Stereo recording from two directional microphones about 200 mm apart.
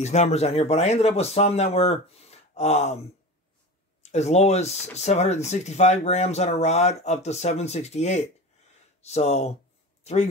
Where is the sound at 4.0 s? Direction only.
35° left (ahead or behind).